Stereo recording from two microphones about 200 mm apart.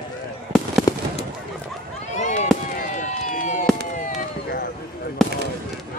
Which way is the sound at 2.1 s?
35° left (ahead or behind).